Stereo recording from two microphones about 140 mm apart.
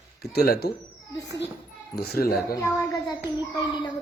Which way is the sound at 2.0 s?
90° left.